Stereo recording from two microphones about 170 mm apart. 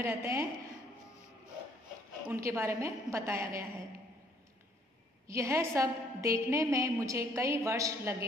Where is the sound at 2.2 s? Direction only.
15° right (ahead or behind).